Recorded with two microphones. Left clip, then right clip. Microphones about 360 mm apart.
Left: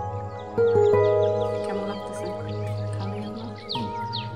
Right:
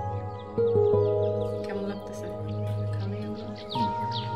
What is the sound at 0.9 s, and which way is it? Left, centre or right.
Music, left.